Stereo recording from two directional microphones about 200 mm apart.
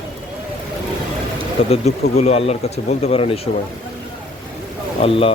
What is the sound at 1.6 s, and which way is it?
Speech, 30° left (ahead or behind).